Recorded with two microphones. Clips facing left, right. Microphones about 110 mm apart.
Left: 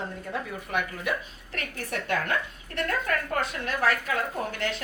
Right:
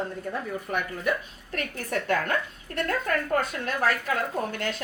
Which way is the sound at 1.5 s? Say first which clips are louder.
Right 4 dB; 40° right (ahead or behind).